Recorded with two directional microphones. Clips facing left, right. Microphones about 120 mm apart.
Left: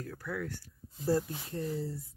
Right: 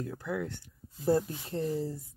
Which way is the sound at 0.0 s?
20° right (ahead or behind).